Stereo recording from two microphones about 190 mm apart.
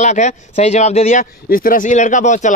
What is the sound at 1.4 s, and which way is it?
Speech, 50° left (ahead or behind).